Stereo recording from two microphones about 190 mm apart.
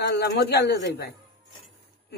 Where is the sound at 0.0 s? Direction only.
60° left (ahead or behind).